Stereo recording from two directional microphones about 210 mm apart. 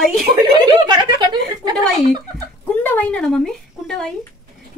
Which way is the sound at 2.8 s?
10° left (ahead or behind).